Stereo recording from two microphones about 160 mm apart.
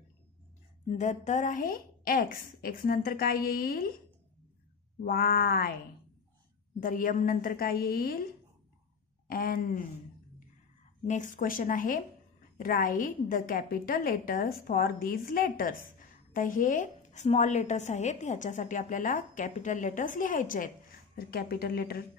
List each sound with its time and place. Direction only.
0.8 s a woman's voice: 50° left (ahead or behind); by 3.9 s 65° left (ahead or behind)
5.0 s speech: 70° left (ahead or behind)
6.8 s a woman's voice: 55° left (ahead or behind)
9.3 s a woman's voice: 60° left (ahead or behind)
11.1 s a woman's voice: 50° left (ahead or behind)
21.3 s speech: 75° left (ahead or behind)